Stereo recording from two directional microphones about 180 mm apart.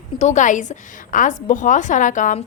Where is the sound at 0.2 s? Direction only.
40° left (ahead or behind).